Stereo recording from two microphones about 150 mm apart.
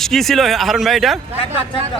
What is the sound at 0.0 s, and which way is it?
Speech, centre (ahead or behind).